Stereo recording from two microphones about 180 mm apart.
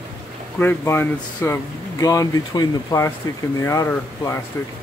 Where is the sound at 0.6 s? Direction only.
10° left (ahead or behind).